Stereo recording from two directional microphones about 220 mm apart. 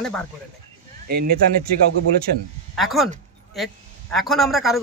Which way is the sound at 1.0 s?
45° right (ahead or behind).